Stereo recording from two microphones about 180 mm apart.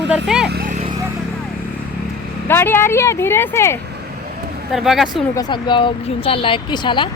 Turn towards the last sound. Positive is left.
turn(degrees=25)  # may be behind; listen again after turning